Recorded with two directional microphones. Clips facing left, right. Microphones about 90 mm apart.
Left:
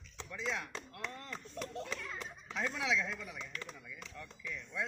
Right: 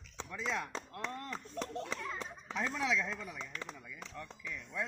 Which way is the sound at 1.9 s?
30° right (ahead or behind).